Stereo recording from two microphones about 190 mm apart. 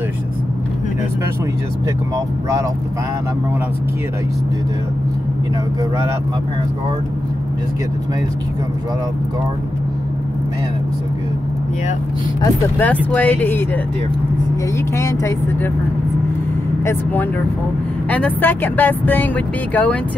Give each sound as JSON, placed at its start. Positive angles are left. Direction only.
{"t": 12.4, "sound": "speech", "side_deg": 15}
{"t": 15.0, "sound": "speech", "side_deg": 15}
{"t": 16.8, "sound": "speech", "side_deg": 10}